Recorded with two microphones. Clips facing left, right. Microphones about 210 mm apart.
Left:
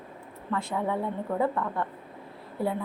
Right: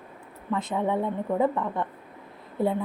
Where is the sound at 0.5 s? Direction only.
20° right (ahead or behind).